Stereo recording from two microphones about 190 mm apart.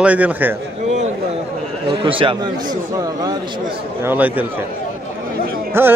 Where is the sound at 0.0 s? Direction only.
5° right (ahead or behind).